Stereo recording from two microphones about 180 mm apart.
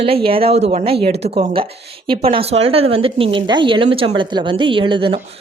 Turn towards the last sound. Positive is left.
turn(degrees=-30)  # may be behind; listen again after turning